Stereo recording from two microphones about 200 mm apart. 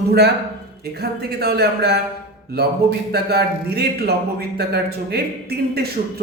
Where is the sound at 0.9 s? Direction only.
50° right (ahead or behind).